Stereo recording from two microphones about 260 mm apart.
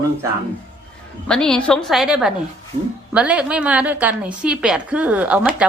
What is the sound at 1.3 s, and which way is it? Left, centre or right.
A woman's voice, centre.